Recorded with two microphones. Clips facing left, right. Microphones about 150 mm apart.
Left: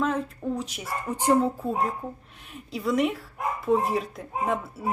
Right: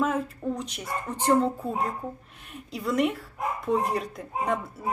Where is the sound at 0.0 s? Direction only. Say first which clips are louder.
Even; 5° right (ahead or behind).